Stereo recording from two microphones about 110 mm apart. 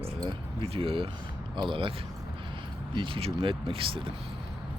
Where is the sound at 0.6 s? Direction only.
60° right (ahead or behind).